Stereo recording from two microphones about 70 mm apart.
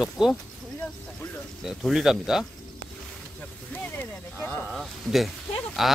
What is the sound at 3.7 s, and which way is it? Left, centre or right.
Speech, left.